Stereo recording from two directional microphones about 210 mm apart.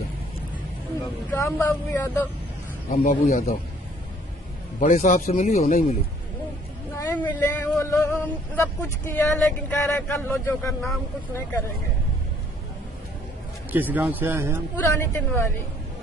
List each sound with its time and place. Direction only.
1.3 s speech: 10° left (ahead or behind)
2.9 s speech: 35° left (ahead or behind)
4.7 s speech: 35° left (ahead or behind)
7.0 s speech: 10° left (ahead or behind)
13.7 s speech: 10° right (ahead or behind)
15.0 s speech: 10° left (ahead or behind)